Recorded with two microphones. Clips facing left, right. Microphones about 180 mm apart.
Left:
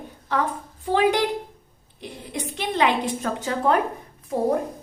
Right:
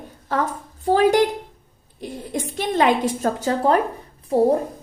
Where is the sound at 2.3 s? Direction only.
45° right (ahead or behind).